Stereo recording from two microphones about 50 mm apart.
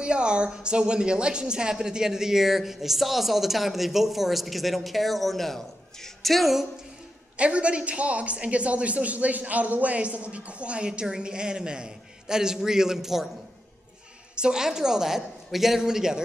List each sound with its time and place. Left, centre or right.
0.0 s speech: centre
7.3 s a man's voice: right; by 13.3 s centre
14.3 s a man's voice: centre